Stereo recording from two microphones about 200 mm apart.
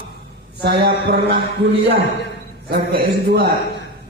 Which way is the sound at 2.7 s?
50° right (ahead or behind).